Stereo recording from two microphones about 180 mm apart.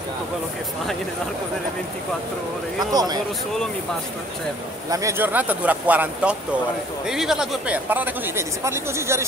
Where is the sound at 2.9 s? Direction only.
20° right (ahead or behind).